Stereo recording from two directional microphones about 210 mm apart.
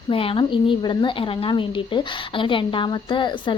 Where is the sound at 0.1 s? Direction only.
25° left (ahead or behind).